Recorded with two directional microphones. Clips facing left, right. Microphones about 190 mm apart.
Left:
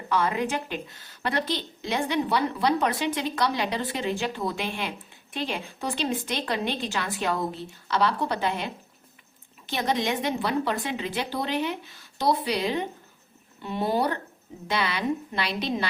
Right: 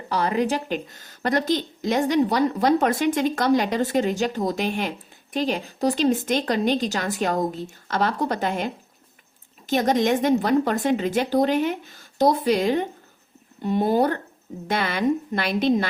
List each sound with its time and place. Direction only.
0.1 s speech: 40° right (ahead or behind)